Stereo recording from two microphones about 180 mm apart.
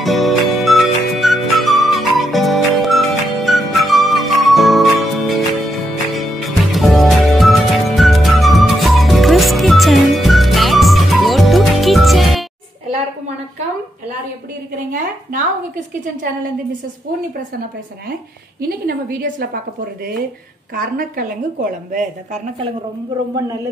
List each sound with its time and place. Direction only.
0.0 s music: centre (ahead or behind)
18.7 s a woman's voice: 55° right (ahead or behind)
20.7 s a woman's voice: 50° right (ahead or behind)